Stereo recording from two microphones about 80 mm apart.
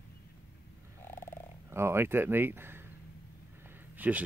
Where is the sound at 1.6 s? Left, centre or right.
Right.